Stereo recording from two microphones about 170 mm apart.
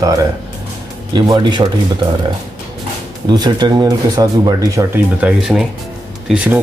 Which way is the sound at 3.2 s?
25° right (ahead or behind).